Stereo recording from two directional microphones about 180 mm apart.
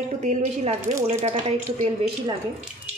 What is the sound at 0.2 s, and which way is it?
Speech, 40° right (ahead or behind).